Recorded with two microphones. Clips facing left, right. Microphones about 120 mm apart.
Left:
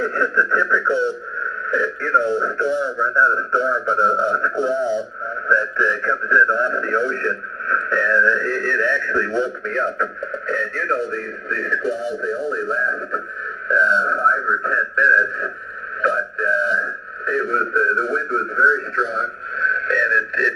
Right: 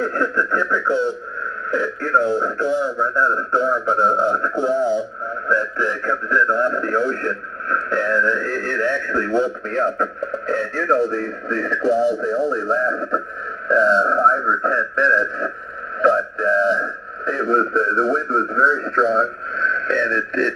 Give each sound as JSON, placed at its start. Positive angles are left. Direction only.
{"t": 0.0, "sound": "speech", "side_deg": -40}